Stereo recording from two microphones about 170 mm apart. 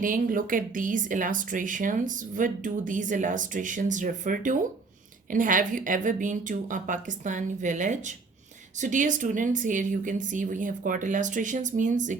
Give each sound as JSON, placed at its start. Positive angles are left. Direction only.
{"t": 0.0, "sound": "speech", "side_deg": -55}